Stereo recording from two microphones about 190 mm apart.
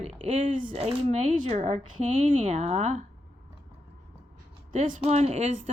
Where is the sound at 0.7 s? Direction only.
35° right (ahead or behind).